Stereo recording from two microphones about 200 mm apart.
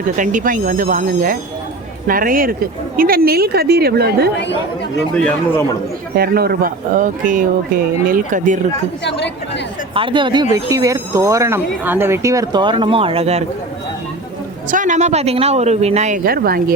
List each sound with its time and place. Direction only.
0.2 s speech: 40° right (ahead or behind)
4.9 s speech: 5° left (ahead or behind)
6.1 s speech: 50° right (ahead or behind)
9.0 s a woman's voice: 60° left (ahead or behind)
9.9 s speech: 25° right (ahead or behind)
14.7 s speech: 40° right (ahead or behind)